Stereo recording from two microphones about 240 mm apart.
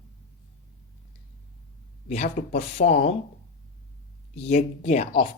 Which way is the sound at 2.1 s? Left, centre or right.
Left.